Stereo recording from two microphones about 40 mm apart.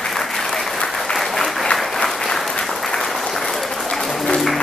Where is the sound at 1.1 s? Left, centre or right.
Centre.